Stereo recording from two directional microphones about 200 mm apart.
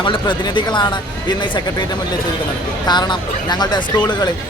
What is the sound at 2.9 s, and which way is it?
Speech, 20° left (ahead or behind).